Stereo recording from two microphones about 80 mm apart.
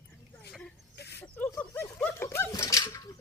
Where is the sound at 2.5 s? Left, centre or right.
Left.